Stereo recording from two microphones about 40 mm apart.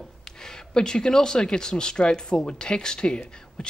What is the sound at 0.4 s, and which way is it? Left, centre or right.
Speech, centre.